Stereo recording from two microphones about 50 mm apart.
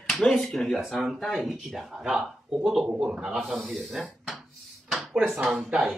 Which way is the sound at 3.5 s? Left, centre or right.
Centre.